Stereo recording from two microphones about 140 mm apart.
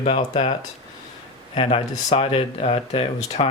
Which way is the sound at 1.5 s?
45° left (ahead or behind).